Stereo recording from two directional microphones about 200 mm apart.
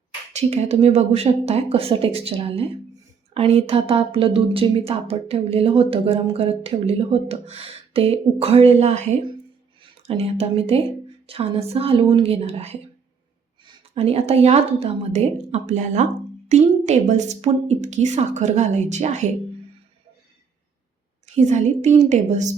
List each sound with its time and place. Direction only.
0.3 s a woman's voice: 30° right (ahead or behind)
10.1 s a woman's voice: 30° right (ahead or behind)
21.3 s a woman's voice: 35° right (ahead or behind)